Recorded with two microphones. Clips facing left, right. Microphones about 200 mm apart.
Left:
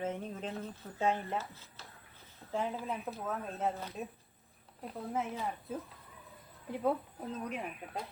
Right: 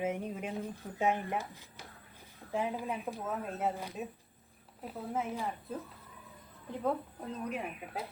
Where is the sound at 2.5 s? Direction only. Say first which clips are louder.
Right 1 dB; 15° right (ahead or behind).